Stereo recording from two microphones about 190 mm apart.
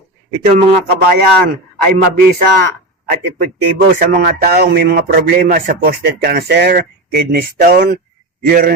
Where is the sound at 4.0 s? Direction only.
50° right (ahead or behind).